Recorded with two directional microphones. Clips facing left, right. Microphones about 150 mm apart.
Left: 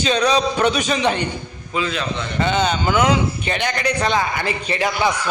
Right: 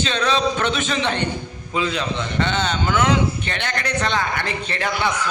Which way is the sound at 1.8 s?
20° right (ahead or behind).